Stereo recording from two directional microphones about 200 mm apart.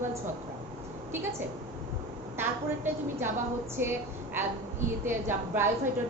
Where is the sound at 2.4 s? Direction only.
10° right (ahead or behind).